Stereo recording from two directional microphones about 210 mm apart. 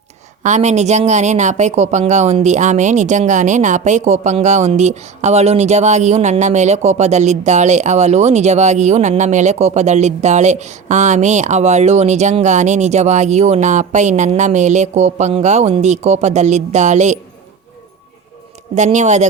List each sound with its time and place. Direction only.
0.4 s speech: 35° right (ahead or behind)
18.7 s speech: 35° right (ahead or behind)